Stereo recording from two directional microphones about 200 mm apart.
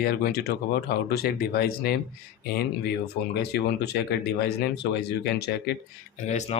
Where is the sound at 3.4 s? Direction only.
55° left (ahead or behind).